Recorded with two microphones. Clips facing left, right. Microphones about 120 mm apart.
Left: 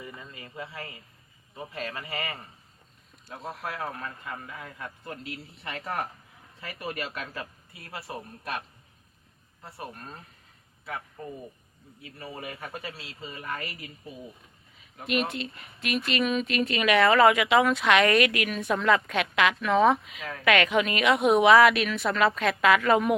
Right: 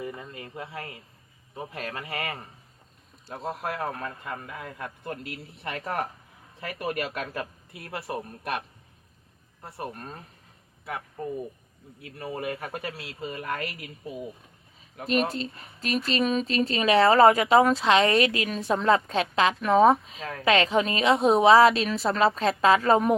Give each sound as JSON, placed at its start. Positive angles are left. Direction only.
{"t": 0.0, "sound": "a sound", "side_deg": -50}
{"t": 1.5, "sound": "speech", "side_deg": -50}
{"t": 3.2, "sound": "speech", "side_deg": -40}
{"t": 6.6, "sound": "speech", "side_deg": -50}
{"t": 9.7, "sound": "speech", "side_deg": -45}
{"t": 12.0, "sound": "speech", "side_deg": -50}
{"t": 15.0, "sound": "speech", "side_deg": -35}